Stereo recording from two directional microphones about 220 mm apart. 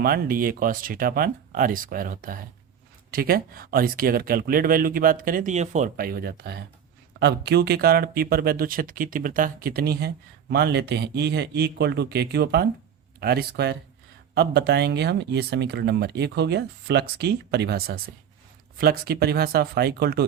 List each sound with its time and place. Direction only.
0.0 s speech: 45° right (ahead or behind)